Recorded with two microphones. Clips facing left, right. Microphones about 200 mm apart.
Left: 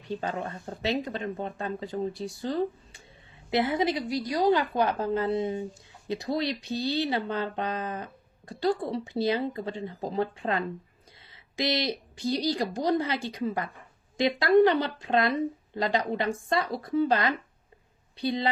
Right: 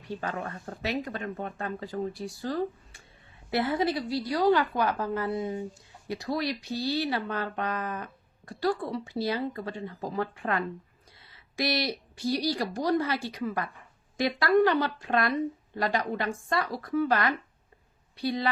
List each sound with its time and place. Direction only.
0.1 s speech: 20° left (ahead or behind)